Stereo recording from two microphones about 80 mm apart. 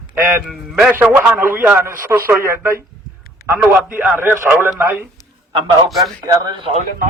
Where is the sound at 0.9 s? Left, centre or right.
Right.